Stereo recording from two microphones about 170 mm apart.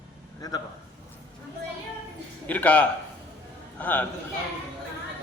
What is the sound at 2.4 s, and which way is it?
A man's voice, 10° left (ahead or behind).